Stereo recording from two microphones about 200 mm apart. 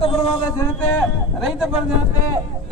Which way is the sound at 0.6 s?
10° left (ahead or behind).